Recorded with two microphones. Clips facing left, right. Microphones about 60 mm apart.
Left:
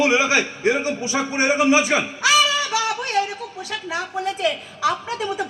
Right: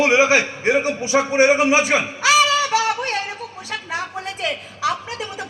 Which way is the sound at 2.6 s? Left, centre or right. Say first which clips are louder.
Right 3 dB; right.